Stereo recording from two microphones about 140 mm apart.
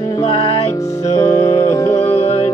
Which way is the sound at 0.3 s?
45° left (ahead or behind).